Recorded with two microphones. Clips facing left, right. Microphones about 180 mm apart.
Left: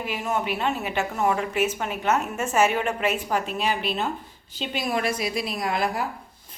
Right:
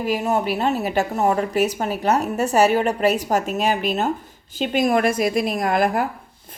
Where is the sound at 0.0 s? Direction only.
40° right (ahead or behind).